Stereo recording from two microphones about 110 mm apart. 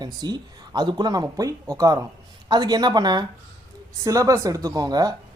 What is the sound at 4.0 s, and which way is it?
Speech, 30° right (ahead or behind).